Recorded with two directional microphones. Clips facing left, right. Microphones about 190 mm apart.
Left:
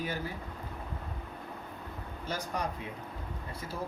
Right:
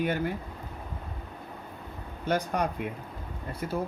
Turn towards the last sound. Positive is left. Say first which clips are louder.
# right 7 dB
turn(degrees=-60)  # may be behind; listen again after turning